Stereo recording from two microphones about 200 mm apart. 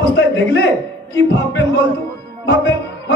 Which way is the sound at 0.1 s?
60° left (ahead or behind).